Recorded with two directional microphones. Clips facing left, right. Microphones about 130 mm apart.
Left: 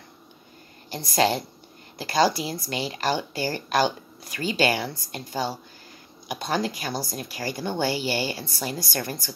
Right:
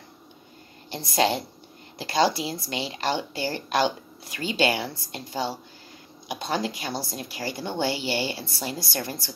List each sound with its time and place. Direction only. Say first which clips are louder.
0.8 s speech: left 1 dB; 25° right (ahead or behind)